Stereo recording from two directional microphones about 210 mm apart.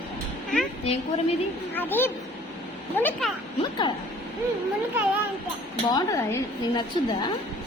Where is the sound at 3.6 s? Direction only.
20° left (ahead or behind).